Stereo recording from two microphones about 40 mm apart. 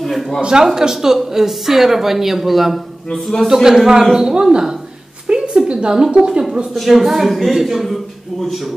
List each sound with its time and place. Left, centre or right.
0.4 s speech: centre
3.1 s a man's voice: centre
3.6 s speech: centre
5.2 s a sound: right
6.1 s speech: right
6.7 s a man's voice: centre